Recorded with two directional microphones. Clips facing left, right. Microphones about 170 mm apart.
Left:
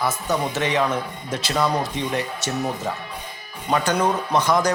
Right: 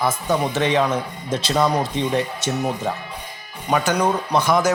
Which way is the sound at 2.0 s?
20° right (ahead or behind).